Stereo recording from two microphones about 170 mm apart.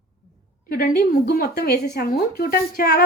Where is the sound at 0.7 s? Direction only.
65° left (ahead or behind).